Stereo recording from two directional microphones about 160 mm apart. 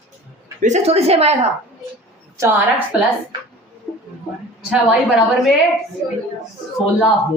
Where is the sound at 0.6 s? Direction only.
45° right (ahead or behind).